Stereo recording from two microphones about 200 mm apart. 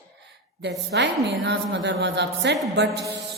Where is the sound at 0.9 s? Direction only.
60° right (ahead or behind).